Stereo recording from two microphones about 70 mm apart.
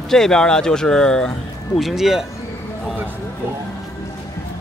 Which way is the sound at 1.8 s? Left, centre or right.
Centre.